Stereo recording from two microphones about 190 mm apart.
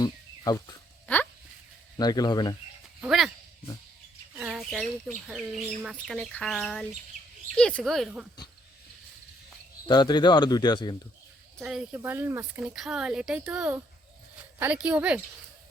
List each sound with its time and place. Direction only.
0.0 s a sound: 20° left (ahead or behind)
1.0 s a sound: 10° left (ahead or behind)
2.0 s speech: 20° left (ahead or behind)
3.0 s speech: centre (ahead or behind)
4.4 s bird: 5° right (ahead or behind)
4.7 s speech: centre (ahead or behind)
9.9 s speech: 20° left (ahead or behind)
11.6 s a woman's voice: 5° right (ahead or behind)